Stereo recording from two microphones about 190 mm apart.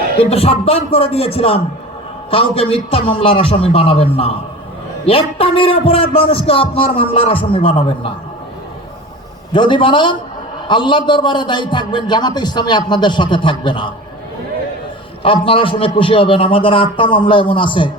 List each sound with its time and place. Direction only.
0.2 s a man's voice: 30° left (ahead or behind)
9.5 s a man's voice: 25° left (ahead or behind)
15.2 s a man's voice: 30° left (ahead or behind)